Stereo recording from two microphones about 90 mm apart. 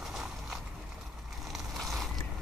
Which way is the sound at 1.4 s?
Centre (ahead or behind).